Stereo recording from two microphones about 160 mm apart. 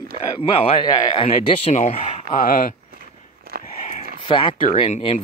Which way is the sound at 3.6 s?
45° left (ahead or behind).